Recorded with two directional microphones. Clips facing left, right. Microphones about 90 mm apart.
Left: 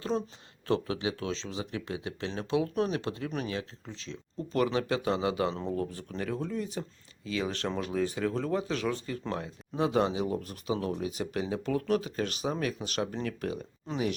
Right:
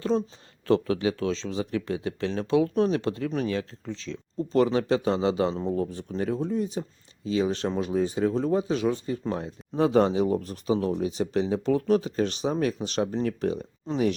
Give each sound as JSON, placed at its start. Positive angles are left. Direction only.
{"t": 0.9, "sound": "speech", "side_deg": -40}
{"t": 4.5, "sound": "speech", "side_deg": -30}
{"t": 9.7, "sound": "speech", "side_deg": -35}